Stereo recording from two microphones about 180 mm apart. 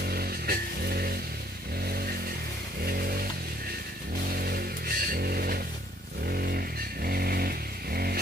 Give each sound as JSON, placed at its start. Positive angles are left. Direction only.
{"t": 0.0, "sound": "music", "side_deg": -60}
{"t": 4.4, "sound": "a sound", "side_deg": -55}
{"t": 6.2, "sound": "vehicle", "side_deg": -60}